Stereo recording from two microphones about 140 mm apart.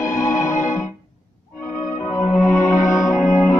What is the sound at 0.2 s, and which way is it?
Music, 20° left (ahead or behind).